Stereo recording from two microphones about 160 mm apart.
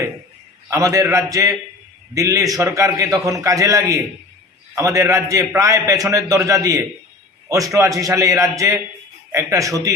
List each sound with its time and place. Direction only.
0.7 s a man's voice: 20° right (ahead or behind)